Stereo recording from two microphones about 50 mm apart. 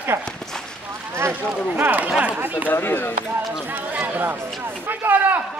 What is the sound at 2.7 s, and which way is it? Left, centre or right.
Speech, left.